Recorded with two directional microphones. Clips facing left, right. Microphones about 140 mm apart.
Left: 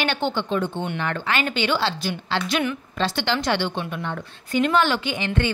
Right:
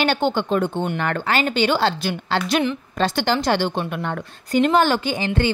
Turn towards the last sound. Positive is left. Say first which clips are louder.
# right 3 dB
turn(degrees=-35)  # may be behind; listen again after turning